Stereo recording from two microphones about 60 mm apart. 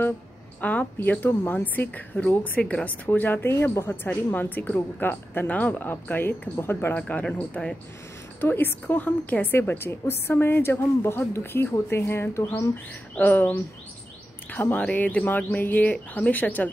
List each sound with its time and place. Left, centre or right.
0.6 s speech: left
3.1 s a woman's voice: left
6.9 s speech: left
8.4 s a woman's voice: left
13.1 s a woman's voice: left
14.8 s speech: left